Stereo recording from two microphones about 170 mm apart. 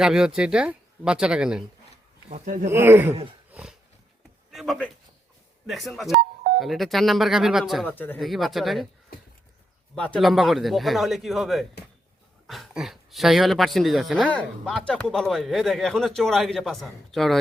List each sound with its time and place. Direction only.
0.0 s speech: 5° right (ahead or behind)
2.3 s speech: 50° right (ahead or behind)
2.6 s speech: 15° right (ahead or behind)
3.5 s dog: 5° right (ahead or behind)
4.5 s a sound: centre (ahead or behind)
5.6 s speech: centre (ahead or behind)
7.9 s speech: 10° left (ahead or behind)
8.2 s speech: centre (ahead or behind)
9.9 s speech: 5° left (ahead or behind)